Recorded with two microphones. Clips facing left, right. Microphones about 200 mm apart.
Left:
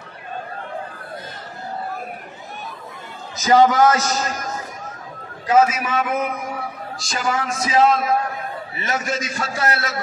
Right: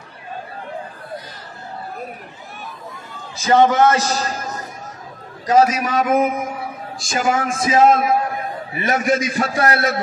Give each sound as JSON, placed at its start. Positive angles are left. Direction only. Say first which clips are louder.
{"t": 3.3, "sound": "a man's voice", "louder": "even", "side_deg": -25}
{"t": 5.5, "sound": "a man's voice", "louder": "right 2 dB", "side_deg": -40}